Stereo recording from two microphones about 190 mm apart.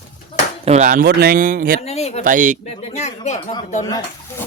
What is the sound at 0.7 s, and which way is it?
Speech, 40° right (ahead or behind).